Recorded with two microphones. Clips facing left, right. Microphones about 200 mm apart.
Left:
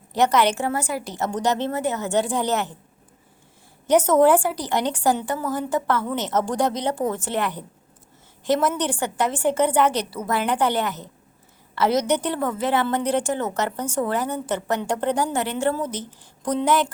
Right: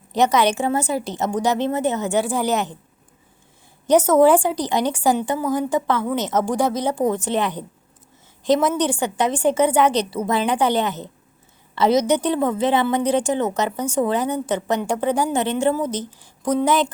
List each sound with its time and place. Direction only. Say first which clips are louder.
0.1 s a woman's voice: right 2 dB; 15° right (ahead or behind)
1.3 s a woman's voice: right 3 dB; 10° right (ahead or behind)
3.8 s a woman's voice: right 2 dB; 10° right (ahead or behind)